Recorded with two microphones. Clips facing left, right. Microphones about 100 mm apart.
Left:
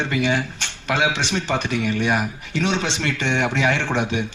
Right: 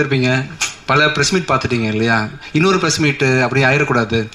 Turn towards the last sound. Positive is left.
turn(degrees=-80)